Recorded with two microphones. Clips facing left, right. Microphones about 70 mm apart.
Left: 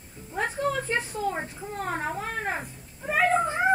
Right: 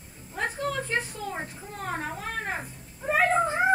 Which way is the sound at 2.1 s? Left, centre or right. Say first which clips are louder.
Left 2 dB; centre.